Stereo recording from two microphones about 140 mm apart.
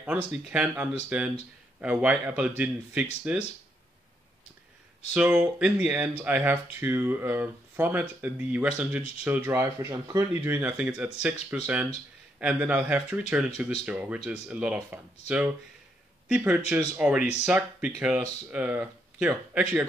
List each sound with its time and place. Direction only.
0.0 s speech: 10° right (ahead or behind)
5.1 s speech: 10° right (ahead or behind)